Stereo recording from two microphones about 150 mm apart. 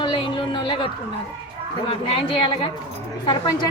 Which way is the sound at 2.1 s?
35° left (ahead or behind).